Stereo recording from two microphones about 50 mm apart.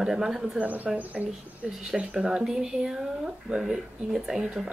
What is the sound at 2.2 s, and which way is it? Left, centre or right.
A woman's voice, centre.